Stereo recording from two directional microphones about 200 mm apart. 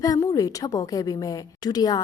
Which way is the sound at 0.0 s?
15° left (ahead or behind).